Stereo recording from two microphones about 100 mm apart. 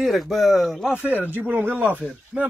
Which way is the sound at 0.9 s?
15° right (ahead or behind).